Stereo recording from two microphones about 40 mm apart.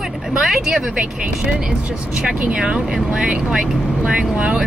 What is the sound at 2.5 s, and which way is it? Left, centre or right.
Speech, right.